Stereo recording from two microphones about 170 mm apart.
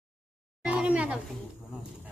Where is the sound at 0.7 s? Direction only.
5° right (ahead or behind).